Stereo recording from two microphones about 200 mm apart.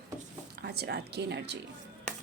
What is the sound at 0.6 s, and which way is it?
Speech, 55° right (ahead or behind).